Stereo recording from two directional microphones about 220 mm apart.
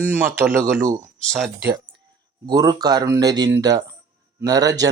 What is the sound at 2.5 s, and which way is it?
Speech, 15° right (ahead or behind).